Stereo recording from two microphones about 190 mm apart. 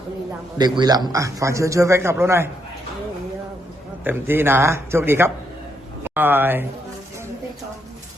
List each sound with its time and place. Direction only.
0.6 s a man's voice: 20° right (ahead or behind)
4.0 s a man's voice: 10° right (ahead or behind)